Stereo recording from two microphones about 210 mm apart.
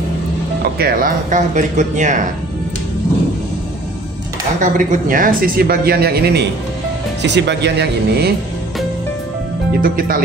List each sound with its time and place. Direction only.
0.7 s speech: 45° right (ahead or behind)
4.6 s speech: 40° right (ahead or behind)
9.8 s speech: 45° right (ahead or behind)